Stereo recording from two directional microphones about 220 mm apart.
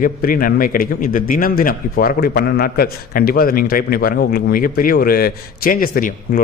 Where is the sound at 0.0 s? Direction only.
40° left (ahead or behind).